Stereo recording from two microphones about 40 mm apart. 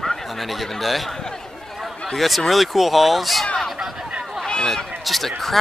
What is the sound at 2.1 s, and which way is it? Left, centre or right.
Speech, centre.